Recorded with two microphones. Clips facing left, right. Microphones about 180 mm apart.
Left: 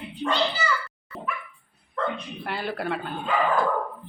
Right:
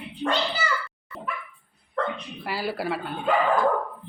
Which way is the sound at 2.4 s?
5° right (ahead or behind).